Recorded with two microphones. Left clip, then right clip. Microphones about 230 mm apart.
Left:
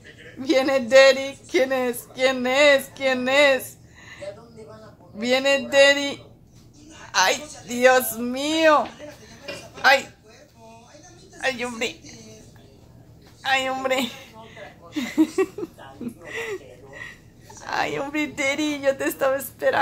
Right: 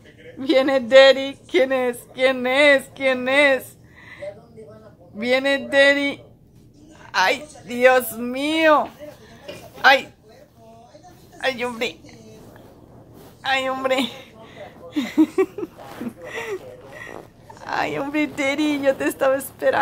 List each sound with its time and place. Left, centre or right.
0.4 s speech: centre
5.2 s speech: centre
11.3 s a woman's voice: centre
13.4 s a woman's voice: centre
16.3 s a sound: centre
17.6 s a woman's voice: centre